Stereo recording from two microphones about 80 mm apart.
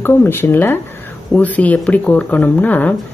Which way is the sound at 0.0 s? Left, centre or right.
Left.